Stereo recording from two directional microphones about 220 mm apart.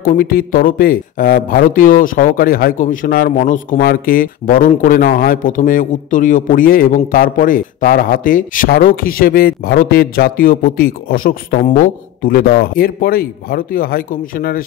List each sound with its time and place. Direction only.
0.0 s speech: 40° left (ahead or behind)